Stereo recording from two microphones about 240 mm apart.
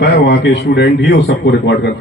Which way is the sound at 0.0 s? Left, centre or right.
Left.